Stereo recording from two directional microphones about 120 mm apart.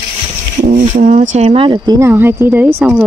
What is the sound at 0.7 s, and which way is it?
Speech, 85° right.